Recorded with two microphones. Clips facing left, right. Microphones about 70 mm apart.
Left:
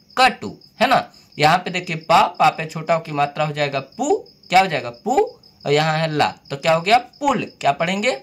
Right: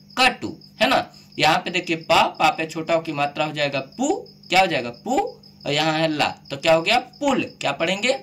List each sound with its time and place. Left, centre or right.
0.1 s speech: left